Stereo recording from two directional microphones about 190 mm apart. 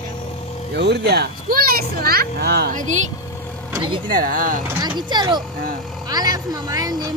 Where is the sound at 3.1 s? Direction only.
15° left (ahead or behind).